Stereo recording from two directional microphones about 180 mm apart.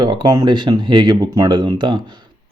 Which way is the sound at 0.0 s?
25° right (ahead or behind).